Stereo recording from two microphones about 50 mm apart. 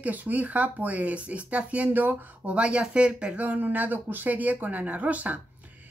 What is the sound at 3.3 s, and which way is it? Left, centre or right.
Speech, right.